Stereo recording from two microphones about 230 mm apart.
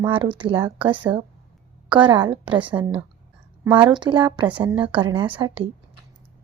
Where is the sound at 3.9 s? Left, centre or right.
Centre.